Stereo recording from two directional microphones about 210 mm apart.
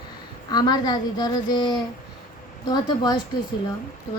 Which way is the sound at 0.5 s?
20° left (ahead or behind).